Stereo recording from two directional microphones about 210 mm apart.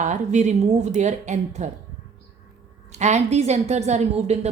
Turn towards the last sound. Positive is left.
turn(degrees=-30)  # may be behind; listen again after turning